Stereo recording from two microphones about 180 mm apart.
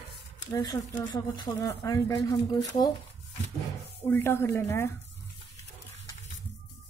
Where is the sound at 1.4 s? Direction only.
20° left (ahead or behind).